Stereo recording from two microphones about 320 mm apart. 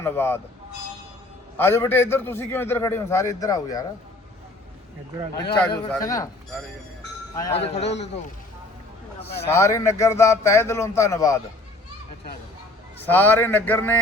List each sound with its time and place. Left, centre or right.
0.0 s a man's voice: centre
1.5 s a man's voice: centre
5.5 s a man's voice: centre
7.3 s a man's voice: centre
9.5 s a man's voice: centre
13.1 s speech: centre